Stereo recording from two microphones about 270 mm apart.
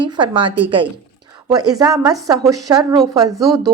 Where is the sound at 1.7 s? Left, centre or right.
Centre.